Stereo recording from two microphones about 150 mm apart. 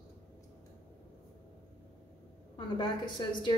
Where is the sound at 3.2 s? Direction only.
30° left (ahead or behind).